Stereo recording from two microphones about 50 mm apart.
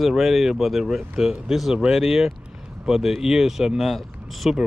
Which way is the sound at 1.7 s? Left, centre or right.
Centre.